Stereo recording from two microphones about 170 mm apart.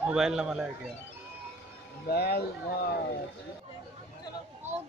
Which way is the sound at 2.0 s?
70° left (ahead or behind).